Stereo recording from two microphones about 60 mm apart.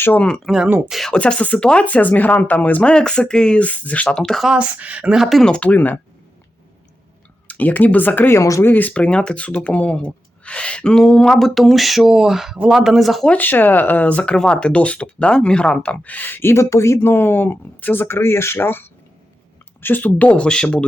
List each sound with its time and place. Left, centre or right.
0.5 s speech: centre
1.1 s speech: centre
2.9 s speech: centre
4.2 s speech: centre
4.5 s speech: right
5.1 s speech: centre
5.5 s speech: centre
5.7 s speech: left
7.4 s speech: left
8.4 s speech: left
8.6 s speech: left; by 13.2 s centre
13.3 s speech: left